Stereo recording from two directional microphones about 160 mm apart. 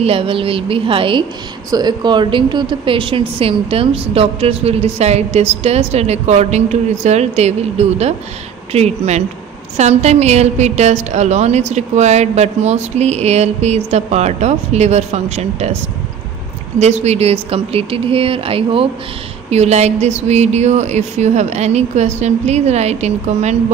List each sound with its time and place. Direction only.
0.0 s a woman's voice: 35° right (ahead or behind)
16.7 s a woman's voice: 45° right (ahead or behind)